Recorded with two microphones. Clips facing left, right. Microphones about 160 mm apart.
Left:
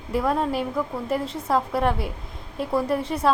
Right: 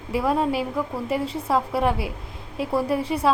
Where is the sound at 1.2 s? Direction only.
30° right (ahead or behind).